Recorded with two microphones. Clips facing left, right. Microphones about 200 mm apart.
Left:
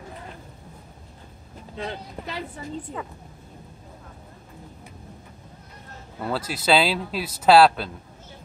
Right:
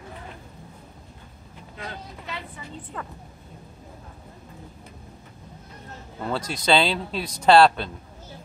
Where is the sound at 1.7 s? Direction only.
35° left (ahead or behind).